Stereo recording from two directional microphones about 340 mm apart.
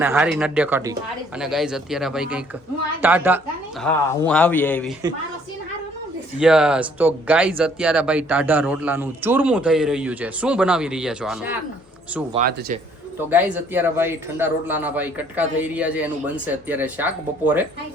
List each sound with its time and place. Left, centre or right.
0.0 s a woman's voice: centre
6.4 s speech: centre
12.4 s speech: right
13.3 s speech: centre